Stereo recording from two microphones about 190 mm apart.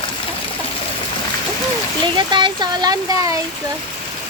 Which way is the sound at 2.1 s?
25° right (ahead or behind).